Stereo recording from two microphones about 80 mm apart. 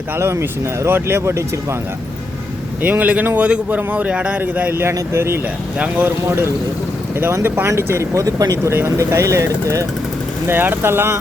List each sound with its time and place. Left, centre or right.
0.2 s speech: right
2.8 s a man's voice: centre
4.8 s a man's voice: right
8.7 s speech: right
10.4 s a man's voice: right